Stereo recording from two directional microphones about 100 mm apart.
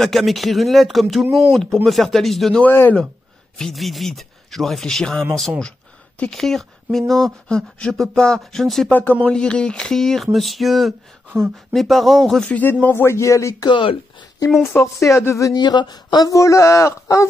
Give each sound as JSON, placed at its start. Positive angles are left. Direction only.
{"t": 0.0, "sound": "speech", "side_deg": 0}
{"t": 2.6, "sound": "speech", "side_deg": 20}
{"t": 3.5, "sound": "speech", "side_deg": 0}
{"t": 6.4, "sound": "speech", "side_deg": 5}
{"t": 12.8, "sound": "speech", "side_deg": 25}
{"t": 13.7, "sound": "speech", "side_deg": 55}
{"t": 14.6, "sound": "speech", "side_deg": 30}
{"t": 15.5, "sound": "a man's voice", "side_deg": 45}